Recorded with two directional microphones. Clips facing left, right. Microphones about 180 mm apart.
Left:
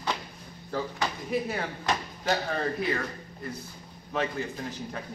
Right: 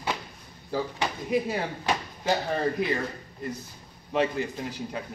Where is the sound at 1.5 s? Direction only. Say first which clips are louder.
Right 2 dB; 15° right (ahead or behind).